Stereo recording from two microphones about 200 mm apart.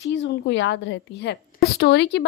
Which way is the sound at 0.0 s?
65° left (ahead or behind).